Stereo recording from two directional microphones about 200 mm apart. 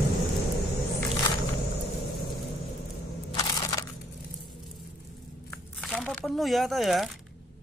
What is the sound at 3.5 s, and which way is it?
Crushing, 15° left (ahead or behind).